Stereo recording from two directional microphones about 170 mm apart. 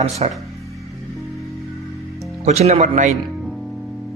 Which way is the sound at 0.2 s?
40° right (ahead or behind).